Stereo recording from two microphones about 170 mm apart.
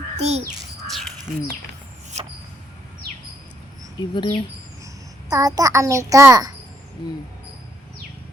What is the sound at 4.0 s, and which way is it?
Speech, 25° left (ahead or behind).